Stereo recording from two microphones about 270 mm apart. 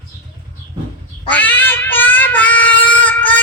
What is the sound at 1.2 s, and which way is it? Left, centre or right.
Child singing, centre.